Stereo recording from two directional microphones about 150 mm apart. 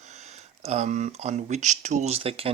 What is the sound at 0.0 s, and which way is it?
Speech, 50° right (ahead or behind).